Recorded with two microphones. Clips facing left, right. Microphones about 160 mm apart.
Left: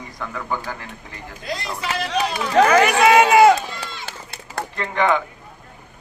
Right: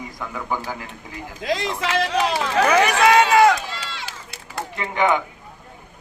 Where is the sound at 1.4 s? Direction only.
90° right.